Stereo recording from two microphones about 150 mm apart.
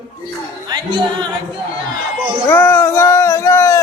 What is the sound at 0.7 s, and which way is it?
Music, 30° right (ahead or behind).